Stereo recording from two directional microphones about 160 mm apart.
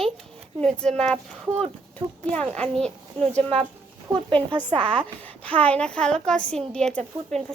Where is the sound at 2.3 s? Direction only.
5° left (ahead or behind).